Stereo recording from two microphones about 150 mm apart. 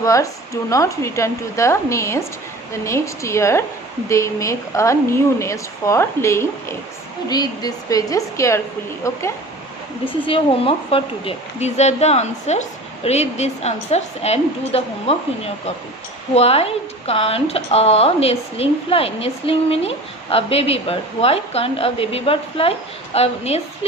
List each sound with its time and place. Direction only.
0.0 s a woman's voice: 20° left (ahead or behind)
10.1 s a woman's voice: 35° left (ahead or behind)